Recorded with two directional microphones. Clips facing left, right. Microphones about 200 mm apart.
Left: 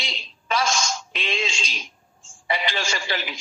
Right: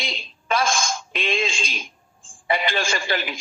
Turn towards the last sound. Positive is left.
turn(degrees=-50)  # may be behind; listen again after turning